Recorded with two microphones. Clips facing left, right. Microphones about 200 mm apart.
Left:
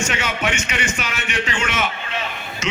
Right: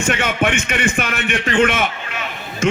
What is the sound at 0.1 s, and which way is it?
A man's voice, 55° right (ahead or behind).